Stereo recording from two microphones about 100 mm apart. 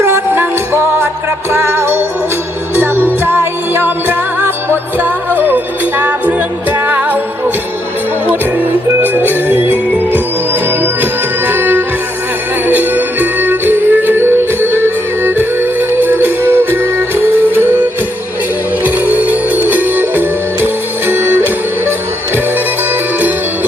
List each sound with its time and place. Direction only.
0.0 s music: 20° right (ahead or behind)
6.0 s music: 15° right (ahead or behind)
9.0 s music: 20° right (ahead or behind)
18.9 s music: 15° right (ahead or behind)